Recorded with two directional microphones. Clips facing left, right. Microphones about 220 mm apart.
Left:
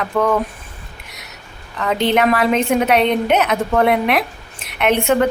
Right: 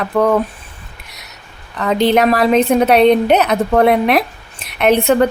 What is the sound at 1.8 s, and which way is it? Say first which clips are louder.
A woman's voice: right 3 dB; 35° right (ahead or behind).